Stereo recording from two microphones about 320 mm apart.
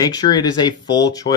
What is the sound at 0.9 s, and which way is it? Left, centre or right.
Speech, left.